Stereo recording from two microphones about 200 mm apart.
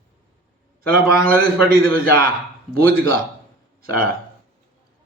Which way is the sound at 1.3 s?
45° right (ahead or behind).